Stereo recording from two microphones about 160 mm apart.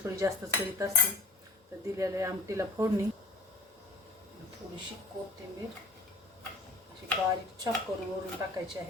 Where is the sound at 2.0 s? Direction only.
20° right (ahead or behind).